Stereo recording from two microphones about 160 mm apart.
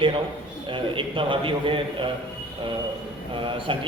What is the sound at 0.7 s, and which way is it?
A man's voice, 30° right (ahead or behind).